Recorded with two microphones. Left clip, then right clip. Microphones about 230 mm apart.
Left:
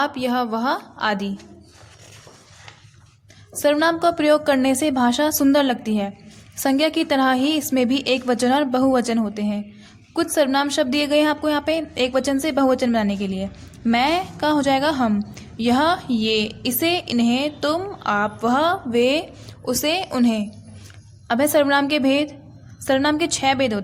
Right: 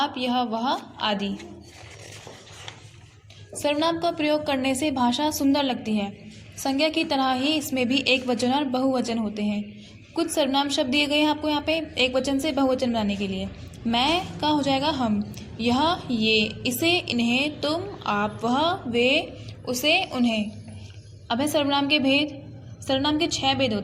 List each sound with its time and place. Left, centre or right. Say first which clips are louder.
0.0 s a woman's voice: left 3 dB; left
3.6 s a woman's voice: left 6 dB; left